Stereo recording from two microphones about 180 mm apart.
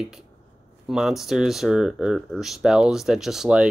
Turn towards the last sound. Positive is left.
turn(degrees=-5)  # may be behind; listen again after turning